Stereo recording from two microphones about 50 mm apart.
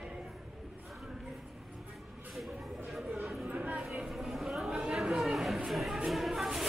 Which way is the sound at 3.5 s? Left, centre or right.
Right.